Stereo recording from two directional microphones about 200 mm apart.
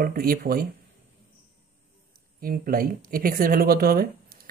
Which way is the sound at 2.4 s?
45° right (ahead or behind).